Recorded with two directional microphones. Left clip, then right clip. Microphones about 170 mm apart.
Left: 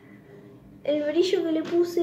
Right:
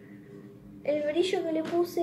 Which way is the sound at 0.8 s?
10° left (ahead or behind).